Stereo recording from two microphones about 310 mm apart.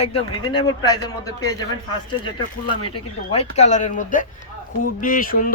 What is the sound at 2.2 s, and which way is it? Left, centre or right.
A man's voice, centre.